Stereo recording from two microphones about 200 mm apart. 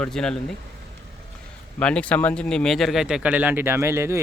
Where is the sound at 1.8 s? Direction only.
5° left (ahead or behind).